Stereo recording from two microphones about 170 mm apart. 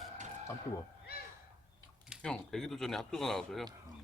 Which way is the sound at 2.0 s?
5° right (ahead or behind).